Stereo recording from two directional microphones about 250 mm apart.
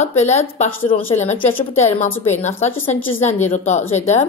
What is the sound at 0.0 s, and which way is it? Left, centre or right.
Speech, left.